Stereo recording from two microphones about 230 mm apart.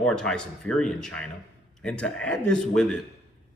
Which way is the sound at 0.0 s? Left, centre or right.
Centre.